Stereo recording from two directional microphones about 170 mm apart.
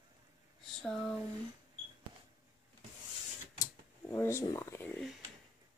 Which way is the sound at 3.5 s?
20° left (ahead or behind).